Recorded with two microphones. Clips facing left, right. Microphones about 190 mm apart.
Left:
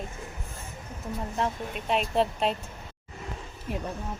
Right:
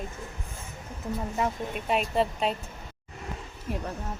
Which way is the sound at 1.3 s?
5° right (ahead or behind).